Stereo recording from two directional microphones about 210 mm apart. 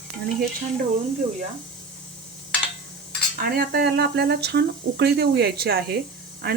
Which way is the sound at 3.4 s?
45° right (ahead or behind).